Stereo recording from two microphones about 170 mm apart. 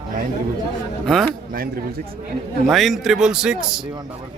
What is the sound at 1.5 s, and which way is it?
Speech, 60° right (ahead or behind).